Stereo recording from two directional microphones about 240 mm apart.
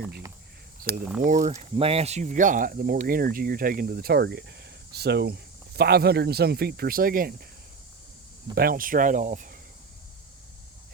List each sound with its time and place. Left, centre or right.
0.8 s speech: right
8.5 s speech: right